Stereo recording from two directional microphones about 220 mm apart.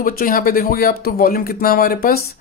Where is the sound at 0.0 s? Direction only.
40° left (ahead or behind).